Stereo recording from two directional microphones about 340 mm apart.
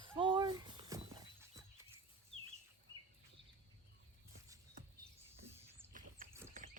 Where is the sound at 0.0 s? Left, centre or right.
Centre.